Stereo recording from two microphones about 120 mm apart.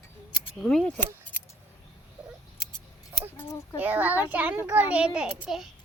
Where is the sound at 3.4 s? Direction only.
25° left (ahead or behind).